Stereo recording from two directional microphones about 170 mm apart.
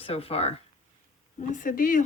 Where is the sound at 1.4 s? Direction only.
50° left (ahead or behind).